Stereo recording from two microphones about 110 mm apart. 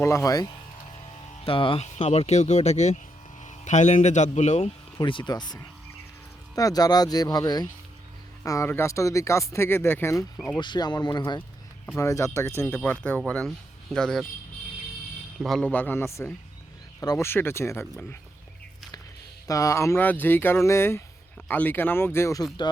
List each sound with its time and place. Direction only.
0.0 s speech: 25° left (ahead or behind)
1.5 s speech: 55° left (ahead or behind)
1.8 s speech: 90° left
4.9 s speech: 45° left (ahead or behind)
6.6 s speech: 35° left (ahead or behind)
8.4 s speech: 25° left (ahead or behind)
10.3 s speech: 5° left (ahead or behind)
10.6 s speech: 40° left (ahead or behind)
11.9 s speech: 30° left (ahead or behind); by 14.3 s 5° left (ahead or behind)
15.4 s speech: centre (ahead or behind)
15.6 s speech: 15° left (ahead or behind)
19.5 s speech: 30° left (ahead or behind)